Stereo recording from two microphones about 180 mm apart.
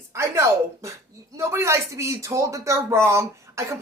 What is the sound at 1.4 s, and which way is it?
Speech, 15° right (ahead or behind).